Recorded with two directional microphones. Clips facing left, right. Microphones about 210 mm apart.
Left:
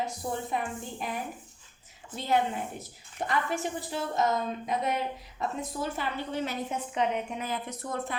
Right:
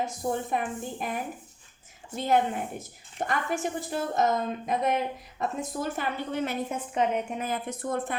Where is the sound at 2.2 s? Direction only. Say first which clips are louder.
Right 3 dB; 50° right (ahead or behind).